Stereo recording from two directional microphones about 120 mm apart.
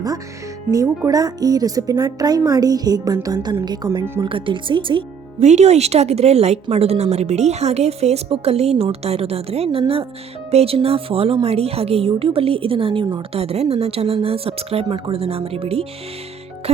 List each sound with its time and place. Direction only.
0.7 s a woman's voice: 30° right (ahead or behind)
5.4 s a woman's voice: 70° right (ahead or behind)